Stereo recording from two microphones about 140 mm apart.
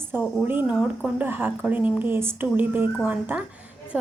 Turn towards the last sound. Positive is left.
turn(degrees=-10)  # may be behind; listen again after turning